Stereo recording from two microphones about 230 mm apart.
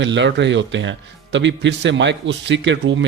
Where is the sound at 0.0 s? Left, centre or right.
Right.